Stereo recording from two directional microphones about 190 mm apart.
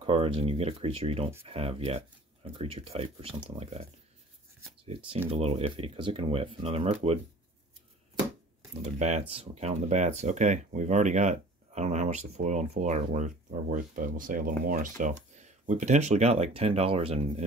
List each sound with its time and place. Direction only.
0.0 s speech: 30° right (ahead or behind)
5.3 s speech: 30° right (ahead or behind)
8.8 s speech: 35° right (ahead or behind)